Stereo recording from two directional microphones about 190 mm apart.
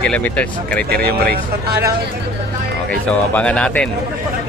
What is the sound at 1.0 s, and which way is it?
Speech, 55° right (ahead or behind).